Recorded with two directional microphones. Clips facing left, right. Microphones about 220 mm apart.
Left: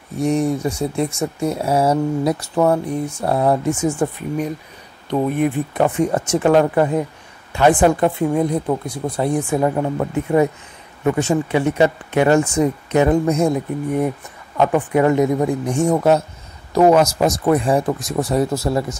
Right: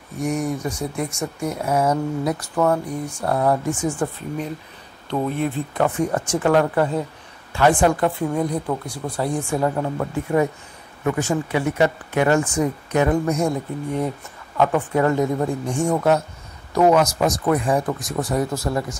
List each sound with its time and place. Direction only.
0.2 s speech: 30° left (ahead or behind)
14.6 s speech: 15° left (ahead or behind)